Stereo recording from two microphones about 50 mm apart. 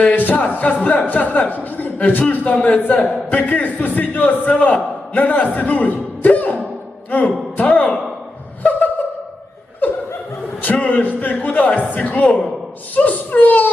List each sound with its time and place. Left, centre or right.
0.1 s a man's voice: left
9.8 s snicker: left
10.8 s a man's voice: left